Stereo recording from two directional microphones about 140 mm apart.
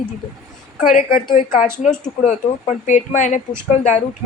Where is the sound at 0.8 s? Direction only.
70° left (ahead or behind).